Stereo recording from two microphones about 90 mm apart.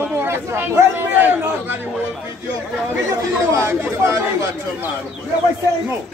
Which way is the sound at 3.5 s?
30° right (ahead or behind).